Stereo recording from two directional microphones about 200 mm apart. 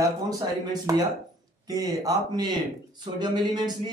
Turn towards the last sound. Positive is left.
turn(degrees=-20)  # may be behind; listen again after turning